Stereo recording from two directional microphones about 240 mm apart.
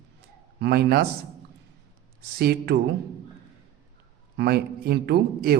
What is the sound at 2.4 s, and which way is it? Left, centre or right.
Speech, right.